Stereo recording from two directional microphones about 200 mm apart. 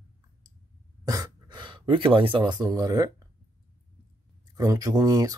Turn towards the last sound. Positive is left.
turn(degrees=-20)  # may be behind; listen again after turning